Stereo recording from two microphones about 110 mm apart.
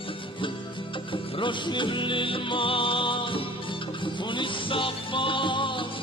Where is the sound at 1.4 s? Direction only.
45° left (ahead or behind).